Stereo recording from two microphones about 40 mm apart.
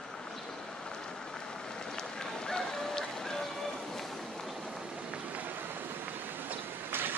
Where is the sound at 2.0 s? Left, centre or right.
Centre.